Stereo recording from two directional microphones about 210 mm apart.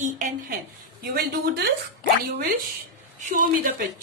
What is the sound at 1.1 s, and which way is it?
Speech, 50° right (ahead or behind).